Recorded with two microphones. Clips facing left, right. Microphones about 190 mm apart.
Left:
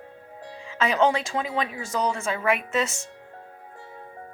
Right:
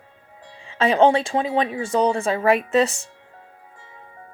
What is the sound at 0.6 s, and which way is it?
Speech, 30° right (ahead or behind).